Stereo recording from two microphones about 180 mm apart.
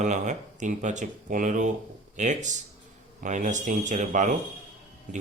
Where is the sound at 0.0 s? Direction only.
40° right (ahead or behind).